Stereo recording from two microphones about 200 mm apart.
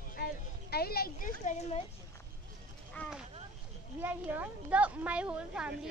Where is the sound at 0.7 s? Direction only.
50° left (ahead or behind).